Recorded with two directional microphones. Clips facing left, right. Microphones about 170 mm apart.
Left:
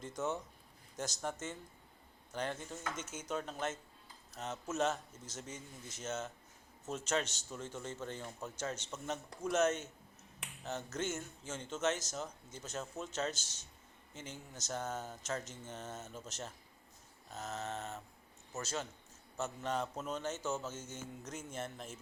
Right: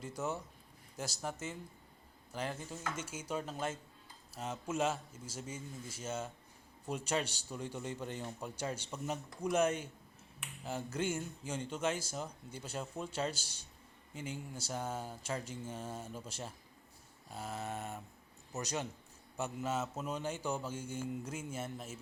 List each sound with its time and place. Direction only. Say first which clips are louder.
0.0 s a man's voice: left 1 dB; 10° right (ahead or behind)
10.6 s finger snapping: right 1 dB; 10° right (ahead or behind)
10.9 s a man's voice: right 4 dB; 10° right (ahead or behind)
19.4 s a man's voice: right 1 dB; 5° right (ahead or behind)